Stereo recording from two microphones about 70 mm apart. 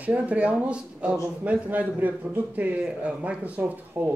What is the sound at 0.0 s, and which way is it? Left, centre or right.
Speech, right.